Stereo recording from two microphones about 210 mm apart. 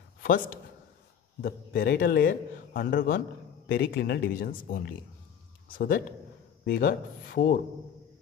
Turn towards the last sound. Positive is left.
turn(degrees=45)  # may be behind; listen again after turning